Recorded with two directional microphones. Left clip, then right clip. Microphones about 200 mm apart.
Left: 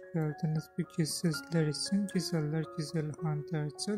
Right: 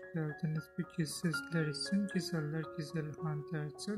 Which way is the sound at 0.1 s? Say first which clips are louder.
Left 5 dB; 25° left (ahead or behind).